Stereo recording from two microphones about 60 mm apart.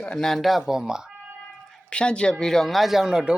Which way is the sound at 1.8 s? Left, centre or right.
Centre.